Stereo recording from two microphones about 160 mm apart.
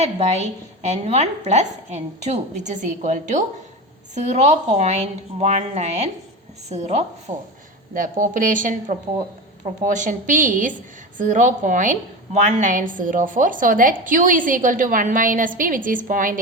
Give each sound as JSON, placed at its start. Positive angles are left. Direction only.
{"t": 0.8, "sound": "a woman's voice", "side_deg": -45}
{"t": 7.3, "sound": "speech", "side_deg": -20}
{"t": 7.9, "sound": "a woman's voice", "side_deg": -55}